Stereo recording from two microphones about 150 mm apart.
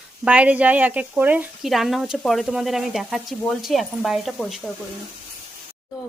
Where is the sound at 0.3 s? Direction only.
10° right (ahead or behind).